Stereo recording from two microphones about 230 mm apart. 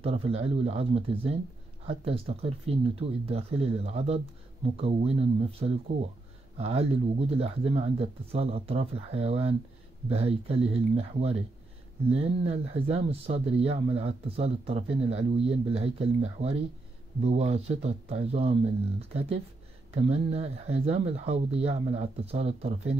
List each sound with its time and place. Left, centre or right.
0.0 s speech: right